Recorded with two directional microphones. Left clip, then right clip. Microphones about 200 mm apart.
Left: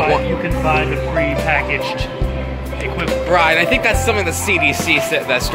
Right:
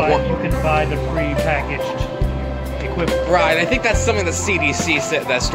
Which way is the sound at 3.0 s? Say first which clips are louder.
Left 2 dB; centre (ahead or behind).